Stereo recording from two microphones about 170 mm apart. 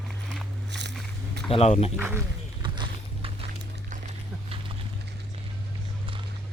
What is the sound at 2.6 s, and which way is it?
Walk, 30° right (ahead or behind).